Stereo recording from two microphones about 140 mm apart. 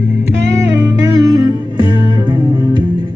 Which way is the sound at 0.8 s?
25° right (ahead or behind).